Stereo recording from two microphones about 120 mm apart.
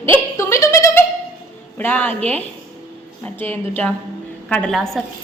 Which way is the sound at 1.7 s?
15° left (ahead or behind).